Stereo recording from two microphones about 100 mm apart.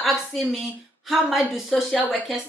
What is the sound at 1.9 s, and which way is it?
Speech, 15° left (ahead or behind).